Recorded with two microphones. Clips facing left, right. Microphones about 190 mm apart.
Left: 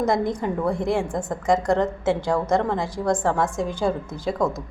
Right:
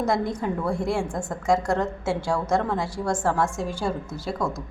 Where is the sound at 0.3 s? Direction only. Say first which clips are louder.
Left 3 dB; 20° left (ahead or behind).